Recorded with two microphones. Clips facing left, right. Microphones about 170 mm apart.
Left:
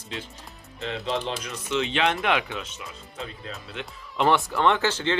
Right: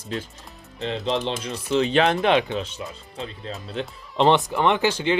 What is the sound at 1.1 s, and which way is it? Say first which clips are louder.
Speech: right 3 dB; 30° right (ahead or behind).